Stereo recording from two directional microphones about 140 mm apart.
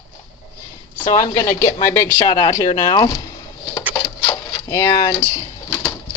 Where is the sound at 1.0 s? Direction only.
25° left (ahead or behind).